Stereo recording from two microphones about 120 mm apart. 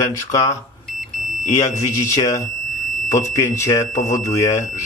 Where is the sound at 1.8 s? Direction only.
30° left (ahead or behind).